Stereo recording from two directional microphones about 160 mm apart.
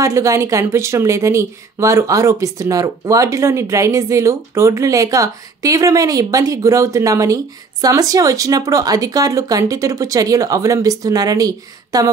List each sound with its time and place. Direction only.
0.0 s a woman's voice: 20° right (ahead or behind)